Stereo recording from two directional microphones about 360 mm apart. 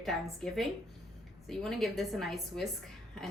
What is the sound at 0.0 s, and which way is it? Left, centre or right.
A woman's voice, centre.